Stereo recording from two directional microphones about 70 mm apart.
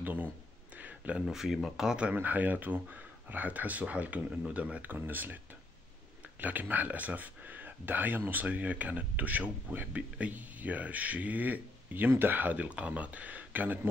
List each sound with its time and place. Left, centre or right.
0.0 s speech: right
0.7 s a sound: right
1.2 s speech: centre
2.1 s speech: right
6.4 s speech: right